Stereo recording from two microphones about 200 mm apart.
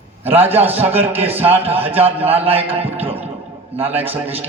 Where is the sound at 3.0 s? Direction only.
30° right (ahead or behind).